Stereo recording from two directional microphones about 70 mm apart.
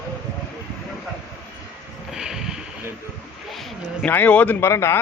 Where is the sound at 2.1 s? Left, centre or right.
Centre.